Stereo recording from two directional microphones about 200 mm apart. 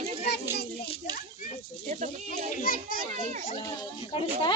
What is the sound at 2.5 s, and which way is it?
Speech, 45° left (ahead or behind).